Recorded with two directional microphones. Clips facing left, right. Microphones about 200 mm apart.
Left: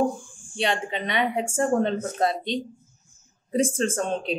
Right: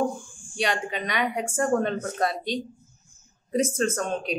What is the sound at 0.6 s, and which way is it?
A woman's voice, 25° left (ahead or behind).